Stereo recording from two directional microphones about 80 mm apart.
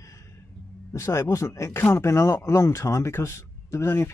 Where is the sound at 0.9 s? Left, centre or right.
Left.